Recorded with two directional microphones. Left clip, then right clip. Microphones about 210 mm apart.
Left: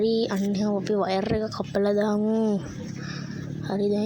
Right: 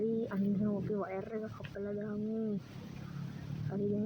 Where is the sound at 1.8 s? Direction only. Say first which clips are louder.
Left 17 dB; 50° left (ahead or behind).